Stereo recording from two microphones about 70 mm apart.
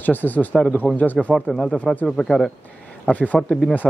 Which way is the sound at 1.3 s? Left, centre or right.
Centre.